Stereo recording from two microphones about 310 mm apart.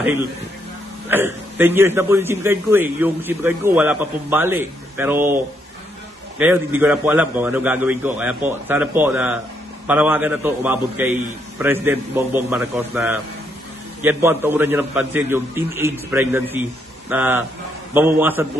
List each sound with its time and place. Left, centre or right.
1.0 s a man's voice: centre